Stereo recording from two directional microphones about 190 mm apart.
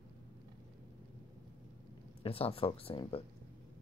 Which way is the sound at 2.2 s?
30° left (ahead or behind).